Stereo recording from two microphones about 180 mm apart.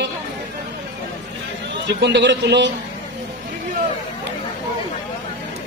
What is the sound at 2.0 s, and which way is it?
Speech, 75° right (ahead or behind).